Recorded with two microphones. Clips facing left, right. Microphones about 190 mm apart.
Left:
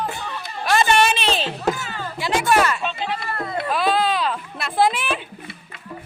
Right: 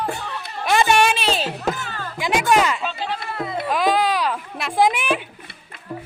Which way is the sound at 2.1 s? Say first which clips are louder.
Right 1 dB; 15° right (ahead or behind).